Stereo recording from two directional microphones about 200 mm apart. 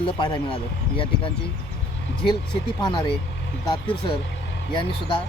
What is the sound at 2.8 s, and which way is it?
Speech, 25° left (ahead or behind).